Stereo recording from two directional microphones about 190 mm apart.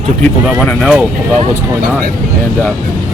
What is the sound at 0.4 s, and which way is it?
Speech, 5° left (ahead or behind).